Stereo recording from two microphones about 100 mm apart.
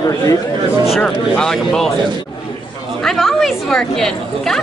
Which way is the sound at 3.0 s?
5° left (ahead or behind).